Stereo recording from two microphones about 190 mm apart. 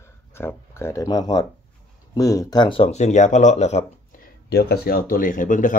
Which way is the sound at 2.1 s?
15° left (ahead or behind).